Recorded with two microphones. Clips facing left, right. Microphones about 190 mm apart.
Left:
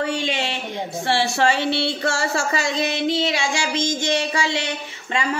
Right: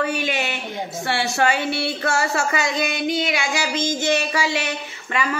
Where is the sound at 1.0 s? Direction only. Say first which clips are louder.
Left 1 dB; 30° left (ahead or behind).